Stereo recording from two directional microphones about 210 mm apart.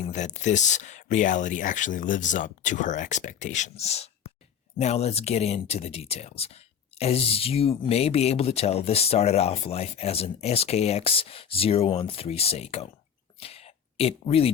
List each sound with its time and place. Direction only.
0.0 s speech: 35° left (ahead or behind)